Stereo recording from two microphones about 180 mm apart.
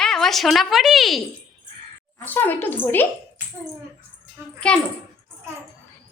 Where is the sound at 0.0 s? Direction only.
Centre (ahead or behind).